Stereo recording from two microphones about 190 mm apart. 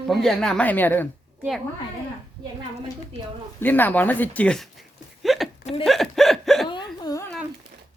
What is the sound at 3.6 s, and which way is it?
Speech, 10° left (ahead or behind).